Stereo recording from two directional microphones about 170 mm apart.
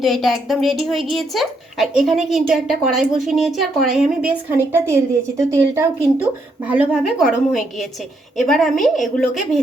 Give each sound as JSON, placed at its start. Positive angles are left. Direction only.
{"t": 0.0, "sound": "a woman's voice", "side_deg": 0}